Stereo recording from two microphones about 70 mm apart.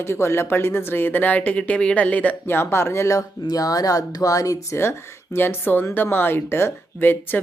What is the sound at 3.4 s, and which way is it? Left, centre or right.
Speech, left.